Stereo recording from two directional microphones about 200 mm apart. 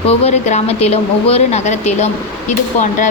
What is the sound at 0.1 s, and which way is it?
A woman's voice, 30° left (ahead or behind).